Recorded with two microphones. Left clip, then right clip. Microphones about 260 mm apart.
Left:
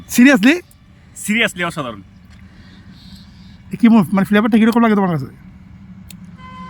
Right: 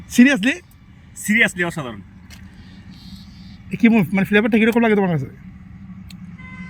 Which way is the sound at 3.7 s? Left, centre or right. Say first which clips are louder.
Left 3 dB; centre.